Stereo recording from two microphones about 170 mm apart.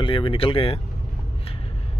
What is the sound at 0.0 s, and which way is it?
Speech, 30° left (ahead or behind).